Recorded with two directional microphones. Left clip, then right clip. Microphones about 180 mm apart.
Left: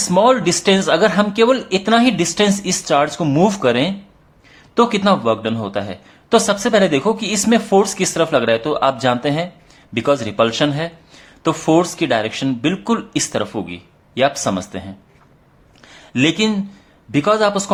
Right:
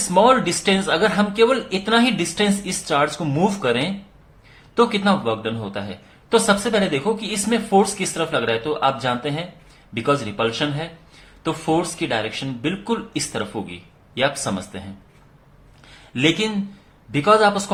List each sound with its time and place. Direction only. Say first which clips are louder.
0.1 s a man's voice: left 1 dB; 30° left (ahead or behind)
15.9 s a man's voice: left 2 dB; 35° left (ahead or behind)